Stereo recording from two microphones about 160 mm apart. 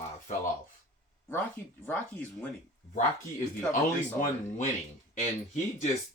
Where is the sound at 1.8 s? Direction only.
10° left (ahead or behind).